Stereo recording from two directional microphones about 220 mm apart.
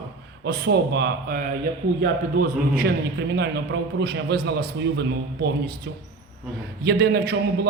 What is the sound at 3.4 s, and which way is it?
A man's voice, 50° right (ahead or behind).